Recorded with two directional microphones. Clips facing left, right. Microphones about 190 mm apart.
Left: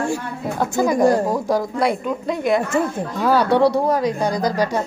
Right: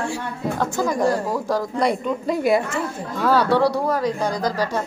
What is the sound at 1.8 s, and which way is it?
Speech, centre (ahead or behind).